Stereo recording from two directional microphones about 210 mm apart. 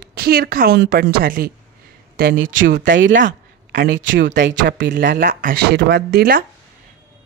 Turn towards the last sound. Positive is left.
turn(degrees=-45)  # may be behind; listen again after turning